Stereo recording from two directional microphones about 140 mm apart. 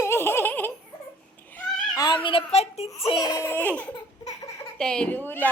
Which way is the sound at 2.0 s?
30° left (ahead or behind).